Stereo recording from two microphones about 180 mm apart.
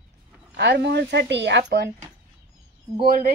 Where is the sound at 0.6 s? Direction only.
70° right (ahead or behind).